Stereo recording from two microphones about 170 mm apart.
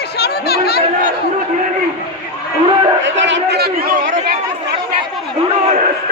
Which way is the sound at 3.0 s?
90° right.